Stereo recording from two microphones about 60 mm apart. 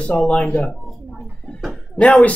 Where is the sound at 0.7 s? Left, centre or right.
Centre.